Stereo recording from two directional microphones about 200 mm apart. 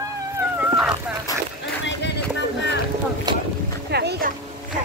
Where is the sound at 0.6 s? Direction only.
5° right (ahead or behind).